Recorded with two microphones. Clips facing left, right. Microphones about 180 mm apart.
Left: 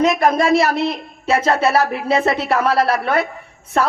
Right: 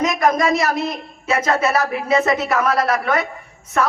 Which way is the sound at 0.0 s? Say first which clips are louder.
Left 2 dB; 30° left (ahead or behind).